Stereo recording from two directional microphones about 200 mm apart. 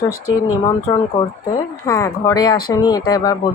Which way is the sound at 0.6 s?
20° left (ahead or behind).